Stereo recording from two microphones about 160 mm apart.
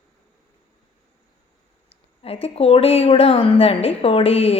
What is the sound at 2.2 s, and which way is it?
A woman's voice, 40° left (ahead or behind).